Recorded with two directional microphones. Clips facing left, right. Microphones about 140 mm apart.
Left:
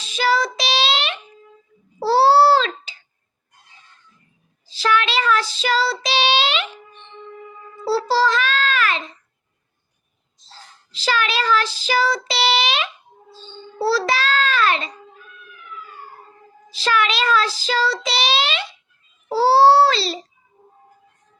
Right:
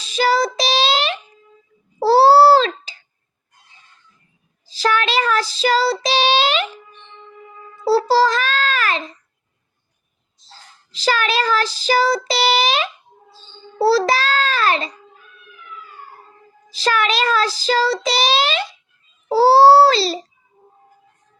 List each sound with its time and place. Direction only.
0.0 s child singing: 40° right (ahead or behind)
2.0 s a sound: 40° right (ahead or behind)
4.6 s child singing: 40° right (ahead or behind)
7.9 s babbling: 40° right (ahead or behind)
10.9 s child singing: 40° right (ahead or behind)
16.7 s child singing: 40° right (ahead or behind)
19.3 s a sound: 40° right (ahead or behind)